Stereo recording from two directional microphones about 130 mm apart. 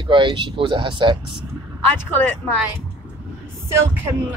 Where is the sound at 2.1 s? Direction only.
15° left (ahead or behind).